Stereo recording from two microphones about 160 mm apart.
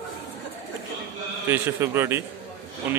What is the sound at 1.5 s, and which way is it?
Speech, 15° right (ahead or behind).